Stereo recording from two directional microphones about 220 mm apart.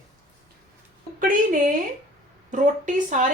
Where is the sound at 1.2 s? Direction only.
40° right (ahead or behind).